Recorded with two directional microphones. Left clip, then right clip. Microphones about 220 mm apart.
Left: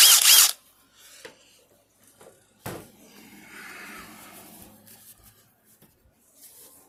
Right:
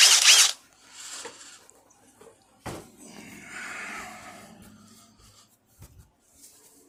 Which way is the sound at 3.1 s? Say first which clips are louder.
Right 5 dB; 40° right (ahead or behind).